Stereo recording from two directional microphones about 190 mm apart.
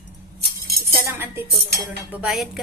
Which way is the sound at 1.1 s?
10° right (ahead or behind).